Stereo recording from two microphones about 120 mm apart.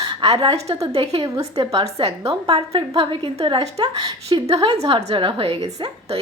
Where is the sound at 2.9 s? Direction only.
50° right (ahead or behind).